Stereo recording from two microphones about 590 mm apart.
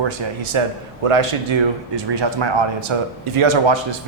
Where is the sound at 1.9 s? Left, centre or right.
Right.